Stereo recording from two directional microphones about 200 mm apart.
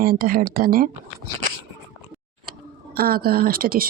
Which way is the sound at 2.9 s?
50° right (ahead or behind).